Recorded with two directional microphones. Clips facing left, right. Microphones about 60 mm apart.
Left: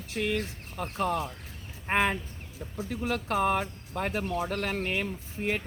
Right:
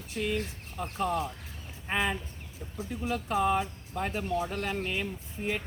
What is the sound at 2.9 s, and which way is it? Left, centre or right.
Speech, left.